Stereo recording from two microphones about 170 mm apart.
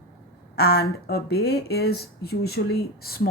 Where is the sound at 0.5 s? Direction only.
70° left (ahead or behind).